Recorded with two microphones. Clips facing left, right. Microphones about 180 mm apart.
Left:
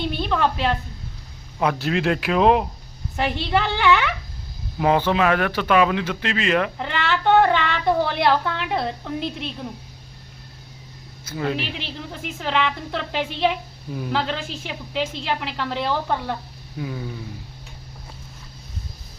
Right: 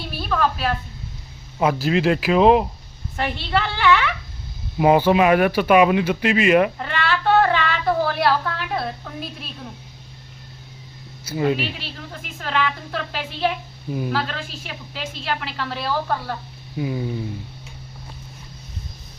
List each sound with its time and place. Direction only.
0.0 s a woman's voice: 20° left (ahead or behind)
1.5 s speech: 5° right (ahead or behind)
3.2 s a woman's voice: 15° left (ahead or behind)
4.8 s speech: 10° right (ahead or behind)
6.7 s child singing: 20° left (ahead or behind)
11.3 s speech: 10° right (ahead or behind)
12.4 s a woman's voice: 20° left (ahead or behind)
16.7 s speech: 10° right (ahead or behind)